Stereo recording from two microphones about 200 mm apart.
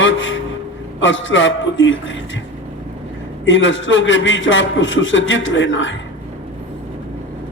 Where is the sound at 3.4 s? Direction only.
70° left (ahead or behind).